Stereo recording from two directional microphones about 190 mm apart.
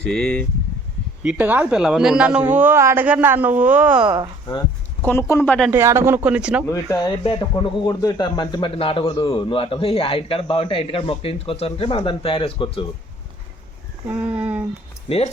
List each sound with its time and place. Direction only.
0.1 s speech: 5° left (ahead or behind)
1.2 s a man's voice: 5° right (ahead or behind)
5.0 s speech: 10° left (ahead or behind)
5.7 s a man's voice: 15° right (ahead or behind)
6.7 s speech: 15° left (ahead or behind)
7.3 s a man's voice: 25° left (ahead or behind)
14.1 s a sound: 5° right (ahead or behind)